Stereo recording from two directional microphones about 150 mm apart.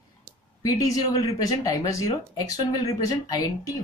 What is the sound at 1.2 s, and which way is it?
Speech, 25° left (ahead or behind).